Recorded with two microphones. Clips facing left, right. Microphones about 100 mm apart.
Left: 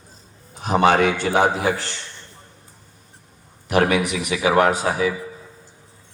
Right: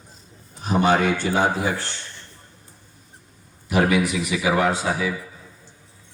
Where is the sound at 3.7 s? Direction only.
80° left.